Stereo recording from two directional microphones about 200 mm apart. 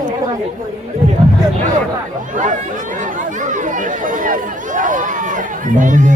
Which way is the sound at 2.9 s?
40° right (ahead or behind).